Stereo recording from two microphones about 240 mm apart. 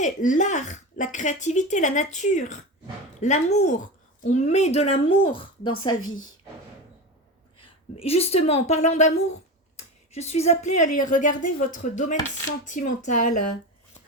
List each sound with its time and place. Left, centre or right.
0.0 s a woman's voice: left
5.9 s a woman's voice: left
7.9 s a woman's voice: left
9.7 s a sound: left
10.9 s speech: left